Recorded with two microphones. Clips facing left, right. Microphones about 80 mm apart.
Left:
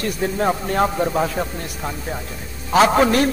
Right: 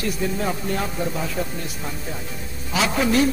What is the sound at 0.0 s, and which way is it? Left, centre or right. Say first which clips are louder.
A man's voice: left 4 dB; left.